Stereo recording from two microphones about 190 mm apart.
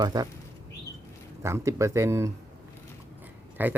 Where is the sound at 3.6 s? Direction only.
10° right (ahead or behind).